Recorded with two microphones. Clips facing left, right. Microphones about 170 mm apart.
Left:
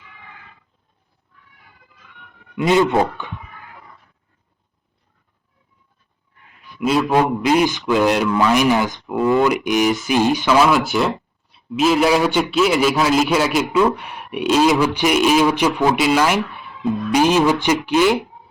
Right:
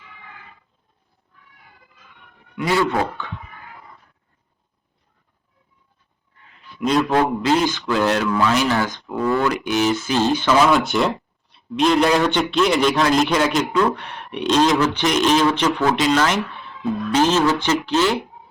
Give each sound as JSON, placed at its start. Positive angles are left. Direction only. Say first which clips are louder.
{"t": 2.6, "sound": "speech", "louder": "left 4 dB", "side_deg": 20}
{"t": 6.7, "sound": "a man's voice", "louder": "left 1 dB", "side_deg": 5}
{"t": 10.7, "sound": "speech", "louder": "left 1 dB", "side_deg": 0}